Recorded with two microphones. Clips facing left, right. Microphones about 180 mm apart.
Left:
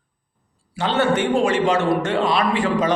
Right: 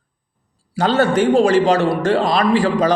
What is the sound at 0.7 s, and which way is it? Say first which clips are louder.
A man's voice: right 4 dB; 40° right (ahead or behind).